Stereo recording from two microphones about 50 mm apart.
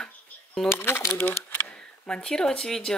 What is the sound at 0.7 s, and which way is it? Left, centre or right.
Speech, left.